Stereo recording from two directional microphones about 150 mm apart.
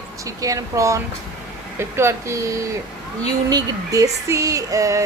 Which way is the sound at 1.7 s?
15° right (ahead or behind).